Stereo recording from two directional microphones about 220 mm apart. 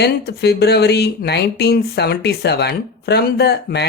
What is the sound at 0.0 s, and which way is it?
Speech, 45° left (ahead or behind).